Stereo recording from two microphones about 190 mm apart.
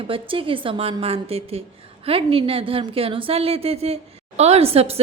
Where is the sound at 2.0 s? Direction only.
30° right (ahead or behind).